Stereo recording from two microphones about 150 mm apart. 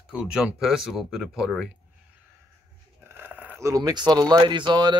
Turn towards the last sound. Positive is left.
turn(degrees=-30)  # may be behind; listen again after turning